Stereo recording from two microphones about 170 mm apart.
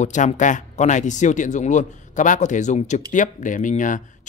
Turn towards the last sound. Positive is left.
turn(degrees=50)  # may be behind; listen again after turning